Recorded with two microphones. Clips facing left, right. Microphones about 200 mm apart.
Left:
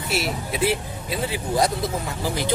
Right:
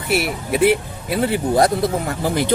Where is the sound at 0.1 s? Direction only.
60° right (ahead or behind).